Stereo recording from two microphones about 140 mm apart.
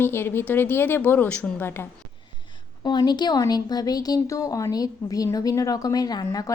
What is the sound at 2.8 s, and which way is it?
A woman's voice, 30° left (ahead or behind).